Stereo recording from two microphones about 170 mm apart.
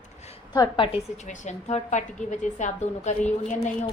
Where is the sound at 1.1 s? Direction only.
45° left (ahead or behind).